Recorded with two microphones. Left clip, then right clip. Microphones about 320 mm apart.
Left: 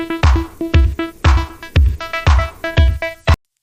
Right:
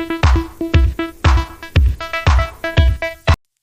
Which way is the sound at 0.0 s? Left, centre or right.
Centre.